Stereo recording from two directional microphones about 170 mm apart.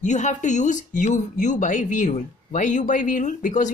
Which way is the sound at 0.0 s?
45° left (ahead or behind).